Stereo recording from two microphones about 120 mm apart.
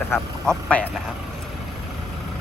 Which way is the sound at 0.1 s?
5° left (ahead or behind).